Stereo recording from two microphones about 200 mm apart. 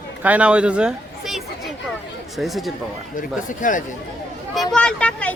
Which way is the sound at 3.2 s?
40° left (ahead or behind).